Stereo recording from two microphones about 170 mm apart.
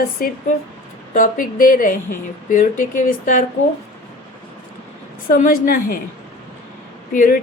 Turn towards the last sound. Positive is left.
turn(degrees=55)  # may be behind; listen again after turning